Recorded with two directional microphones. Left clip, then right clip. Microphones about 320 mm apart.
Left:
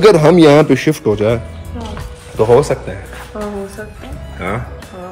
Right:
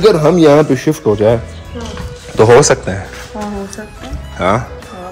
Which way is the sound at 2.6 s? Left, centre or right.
Right.